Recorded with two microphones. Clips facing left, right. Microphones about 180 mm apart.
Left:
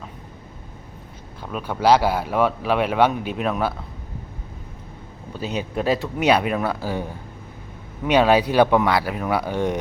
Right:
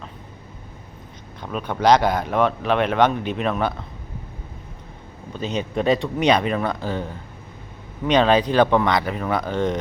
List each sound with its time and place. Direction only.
1.4 s speech: 5° left (ahead or behind)
5.3 s speech: 10° left (ahead or behind)